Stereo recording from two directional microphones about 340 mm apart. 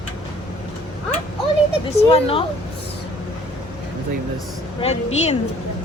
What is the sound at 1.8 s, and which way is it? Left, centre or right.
Speech, centre.